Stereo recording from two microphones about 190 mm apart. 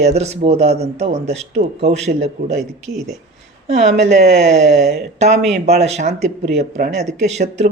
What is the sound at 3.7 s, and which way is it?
Speech, 35° right (ahead or behind).